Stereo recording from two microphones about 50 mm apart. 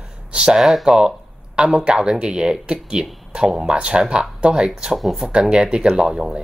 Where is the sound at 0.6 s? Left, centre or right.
Centre.